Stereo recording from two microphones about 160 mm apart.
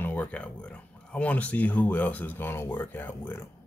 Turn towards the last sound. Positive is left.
turn(degrees=10)  # may be behind; listen again after turning